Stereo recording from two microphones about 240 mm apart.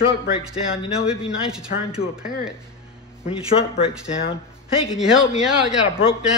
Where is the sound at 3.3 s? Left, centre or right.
Left.